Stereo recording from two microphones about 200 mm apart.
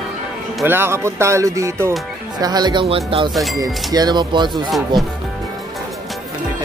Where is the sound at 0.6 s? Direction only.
10° right (ahead or behind).